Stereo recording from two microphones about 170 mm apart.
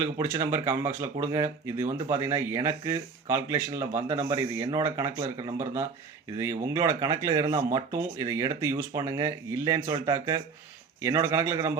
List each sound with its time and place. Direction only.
0.0 s speech: 15° right (ahead or behind)